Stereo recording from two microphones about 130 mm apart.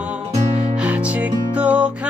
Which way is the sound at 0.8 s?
10° right (ahead or behind).